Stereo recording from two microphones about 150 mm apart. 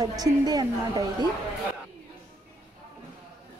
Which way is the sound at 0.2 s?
25° right (ahead or behind).